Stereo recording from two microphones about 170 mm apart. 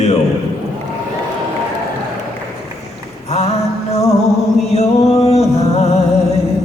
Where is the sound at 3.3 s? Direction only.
40° left (ahead or behind).